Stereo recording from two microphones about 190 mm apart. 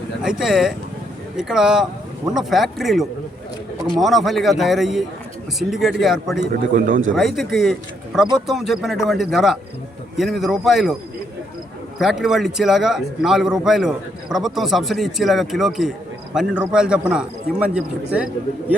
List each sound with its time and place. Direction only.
0.2 s a man's voice: 5° right (ahead or behind)
6.4 s a man's voice: 45° right (ahead or behind)
7.2 s a man's voice: centre (ahead or behind)
11.9 s a man's voice: centre (ahead or behind)